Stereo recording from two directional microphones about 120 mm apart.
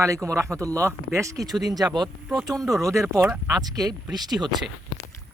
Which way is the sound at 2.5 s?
Centre (ahead or behind).